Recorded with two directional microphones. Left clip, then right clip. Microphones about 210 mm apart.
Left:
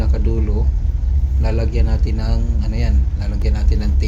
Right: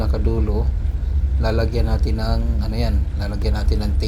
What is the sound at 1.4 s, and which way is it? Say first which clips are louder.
Speech: right 3 dB; 10° right (ahead or behind).